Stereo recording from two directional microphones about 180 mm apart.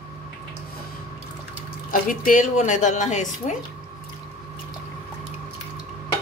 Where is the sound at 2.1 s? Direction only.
50° left (ahead or behind).